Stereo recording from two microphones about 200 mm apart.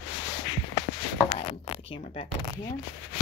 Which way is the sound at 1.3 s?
35° left (ahead or behind).